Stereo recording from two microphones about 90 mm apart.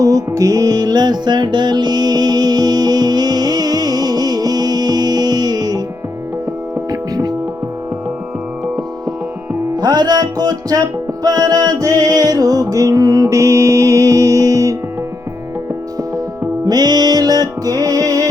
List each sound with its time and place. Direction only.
0.0 s music: 40° right (ahead or behind)
7.1 s music: 45° right (ahead or behind)
9.7 s music: 50° right (ahead or behind)
16.6 s music: 50° right (ahead or behind)